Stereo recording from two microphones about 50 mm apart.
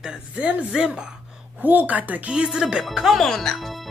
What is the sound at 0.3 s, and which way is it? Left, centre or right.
Speech, right.